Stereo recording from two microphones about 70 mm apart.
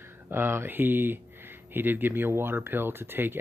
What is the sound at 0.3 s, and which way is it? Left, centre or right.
Speech, right.